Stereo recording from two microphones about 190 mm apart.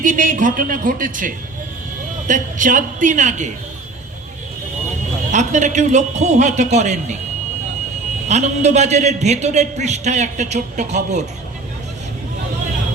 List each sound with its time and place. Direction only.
0.0 s a man's voice: 45° right (ahead or behind)
5.3 s a man's voice: 40° right (ahead or behind)
8.3 s a man's voice: 35° right (ahead or behind)